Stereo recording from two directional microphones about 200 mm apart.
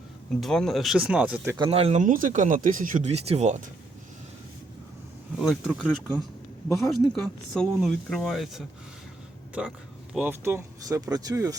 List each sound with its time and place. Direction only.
0.3 s speech: centre (ahead or behind)
1.5 s speech: 25° right (ahead or behind)
5.4 s speech: centre (ahead or behind); by 11.5 s 15° right (ahead or behind)